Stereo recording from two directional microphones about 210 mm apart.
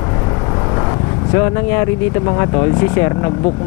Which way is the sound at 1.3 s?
15° left (ahead or behind).